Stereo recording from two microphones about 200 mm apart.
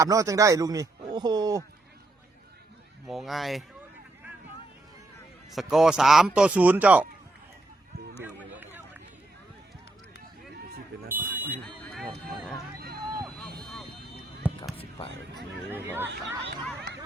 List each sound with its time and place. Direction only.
0.0 s a man's voice: 15° right (ahead or behind)
3.1 s speech: centre (ahead or behind)
5.5 s speech: centre (ahead or behind)
8.5 s run: 10° right (ahead or behind)
11.1 s a man's voice: 10° right (ahead or behind)
11.6 s buzzer: 5° left (ahead or behind)
13.2 s vehicle: centre (ahead or behind)
14.4 s a sound: 5° right (ahead or behind)
15.7 s speech: 10° right (ahead or behind)